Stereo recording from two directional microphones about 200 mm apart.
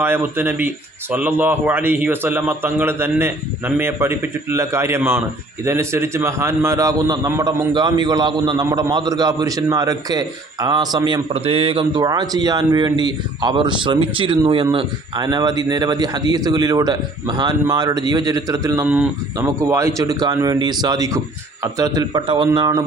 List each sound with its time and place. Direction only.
0.0 s a man's voice: 10° right (ahead or behind)